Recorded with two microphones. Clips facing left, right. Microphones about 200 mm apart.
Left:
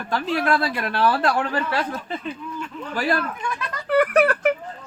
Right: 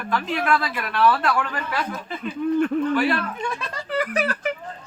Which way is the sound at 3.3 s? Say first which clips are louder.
Right 1 dB; 25° right (ahead or behind).